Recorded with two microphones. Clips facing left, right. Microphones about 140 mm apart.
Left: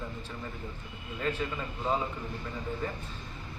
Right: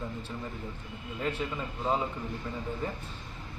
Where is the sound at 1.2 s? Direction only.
20° right (ahead or behind).